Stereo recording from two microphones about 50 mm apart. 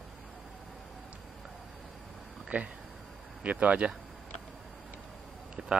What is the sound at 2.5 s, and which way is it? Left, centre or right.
Speech, right.